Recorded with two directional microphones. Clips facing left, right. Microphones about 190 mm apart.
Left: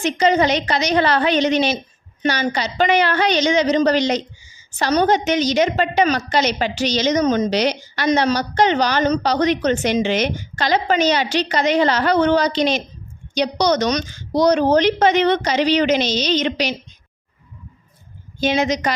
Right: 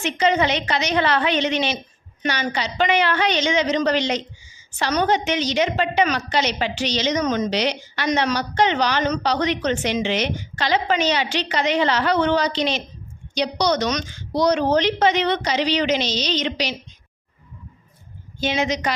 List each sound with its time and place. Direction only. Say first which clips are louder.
0.0 s a woman's voice: left 3 dB; 40° left (ahead or behind)
18.3 s a woman's voice: left 4 dB; 40° left (ahead or behind)